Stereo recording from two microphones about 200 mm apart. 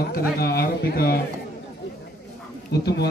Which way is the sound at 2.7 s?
50° left (ahead or behind).